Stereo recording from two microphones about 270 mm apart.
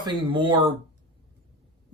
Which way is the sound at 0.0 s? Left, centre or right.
Centre.